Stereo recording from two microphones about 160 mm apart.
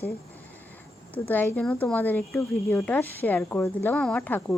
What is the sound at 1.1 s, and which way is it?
A woman's voice, 10° left (ahead or behind).